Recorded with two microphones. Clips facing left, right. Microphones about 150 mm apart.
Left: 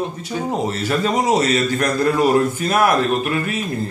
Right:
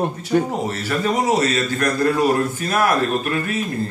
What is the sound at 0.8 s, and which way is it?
Speech, 20° left (ahead or behind).